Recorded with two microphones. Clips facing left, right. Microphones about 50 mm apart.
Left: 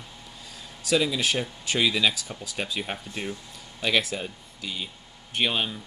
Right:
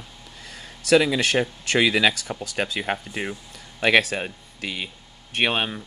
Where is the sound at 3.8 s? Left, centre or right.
Right.